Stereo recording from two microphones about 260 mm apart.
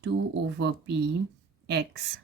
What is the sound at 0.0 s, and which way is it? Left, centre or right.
A woman's voice, right.